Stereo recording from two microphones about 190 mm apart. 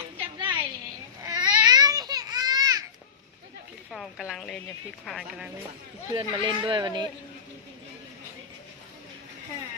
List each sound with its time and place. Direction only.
0.2 s a sound: 25° right (ahead or behind)
1.2 s babbling: 20° right (ahead or behind)
3.9 s speech: centre (ahead or behind)
6.1 s speech: 25° right (ahead or behind)